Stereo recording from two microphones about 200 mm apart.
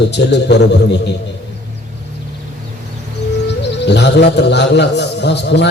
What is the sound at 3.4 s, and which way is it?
A man's voice, 60° left (ahead or behind).